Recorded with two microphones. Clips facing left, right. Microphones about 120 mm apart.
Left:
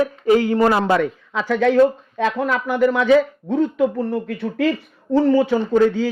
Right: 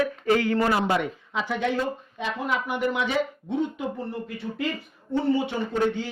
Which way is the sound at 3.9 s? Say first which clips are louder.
Left 10 dB; 90° left.